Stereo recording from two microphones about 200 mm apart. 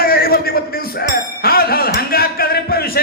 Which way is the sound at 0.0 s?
50° left (ahead or behind).